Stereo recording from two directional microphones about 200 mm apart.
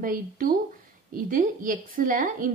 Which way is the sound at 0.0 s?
45° right (ahead or behind).